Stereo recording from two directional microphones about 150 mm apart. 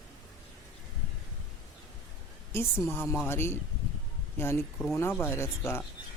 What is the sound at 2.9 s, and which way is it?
Speech, 15° left (ahead or behind).